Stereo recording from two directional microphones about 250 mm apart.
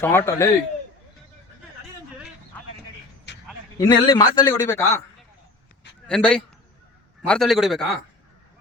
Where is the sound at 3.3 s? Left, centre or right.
Left.